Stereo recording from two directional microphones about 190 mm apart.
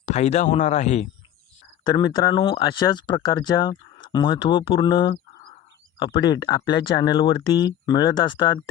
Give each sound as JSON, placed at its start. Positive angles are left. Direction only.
{"t": 0.0, "sound": "speech", "side_deg": 35}
{"t": 1.8, "sound": "speech", "side_deg": 25}